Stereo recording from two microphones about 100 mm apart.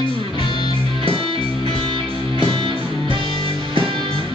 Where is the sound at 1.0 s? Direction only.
65° right (ahead or behind).